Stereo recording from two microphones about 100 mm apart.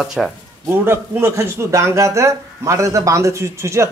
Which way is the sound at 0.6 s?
25° right (ahead or behind).